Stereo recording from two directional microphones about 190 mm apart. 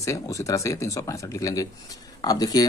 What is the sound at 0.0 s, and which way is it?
Speech, 15° left (ahead or behind).